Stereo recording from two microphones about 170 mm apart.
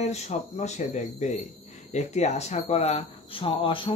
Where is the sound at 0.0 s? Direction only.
40° left (ahead or behind).